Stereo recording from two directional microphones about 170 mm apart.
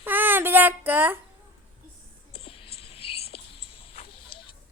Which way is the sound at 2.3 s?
35° left (ahead or behind).